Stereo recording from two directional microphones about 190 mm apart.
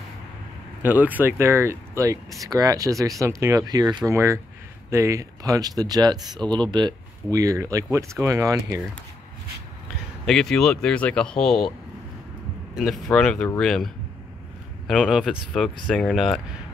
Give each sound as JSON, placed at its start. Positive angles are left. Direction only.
{"t": 0.8, "sound": "speech", "side_deg": -10}
{"t": 10.2, "sound": "speech", "side_deg": 0}
{"t": 12.7, "sound": "speech", "side_deg": 0}